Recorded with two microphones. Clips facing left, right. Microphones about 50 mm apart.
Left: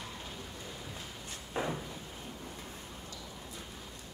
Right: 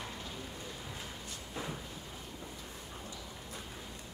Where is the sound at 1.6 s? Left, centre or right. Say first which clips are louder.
Left 7 dB; left.